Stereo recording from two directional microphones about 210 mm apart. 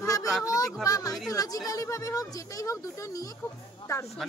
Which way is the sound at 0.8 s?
15° left (ahead or behind).